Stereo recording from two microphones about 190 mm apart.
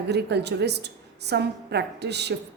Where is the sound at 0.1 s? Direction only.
60° right (ahead or behind).